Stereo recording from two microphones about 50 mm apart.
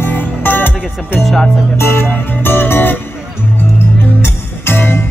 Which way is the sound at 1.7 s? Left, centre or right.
Left.